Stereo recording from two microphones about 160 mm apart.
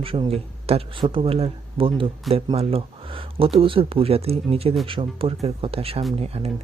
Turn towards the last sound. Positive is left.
turn(degrees=-40)  # may be behind; listen again after turning